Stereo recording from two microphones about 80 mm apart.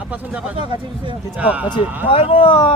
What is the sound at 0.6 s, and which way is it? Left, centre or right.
Speech, right.